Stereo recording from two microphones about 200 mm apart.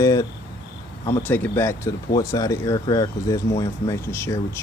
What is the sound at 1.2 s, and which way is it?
Speech, 10° left (ahead or behind).